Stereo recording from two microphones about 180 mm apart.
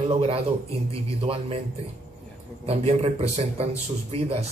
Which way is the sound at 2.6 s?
35° right (ahead or behind).